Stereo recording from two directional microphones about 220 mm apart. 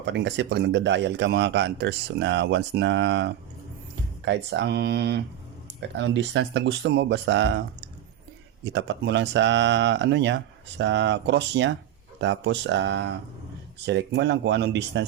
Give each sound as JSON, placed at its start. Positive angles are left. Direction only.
{"t": 0.0, "sound": "a man's voice", "side_deg": -55}
{"t": 8.6, "sound": "a man's voice", "side_deg": -55}